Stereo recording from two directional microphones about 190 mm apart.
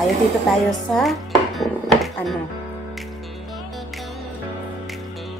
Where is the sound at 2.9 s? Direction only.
Centre (ahead or behind).